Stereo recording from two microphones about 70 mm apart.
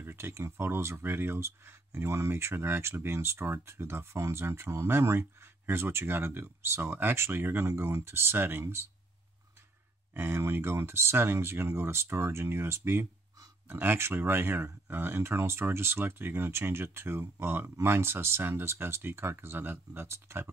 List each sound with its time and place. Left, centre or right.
0.0 s speech: right
10.1 s speech: right